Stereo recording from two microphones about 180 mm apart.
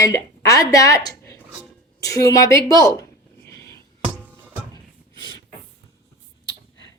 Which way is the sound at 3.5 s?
15° left (ahead or behind).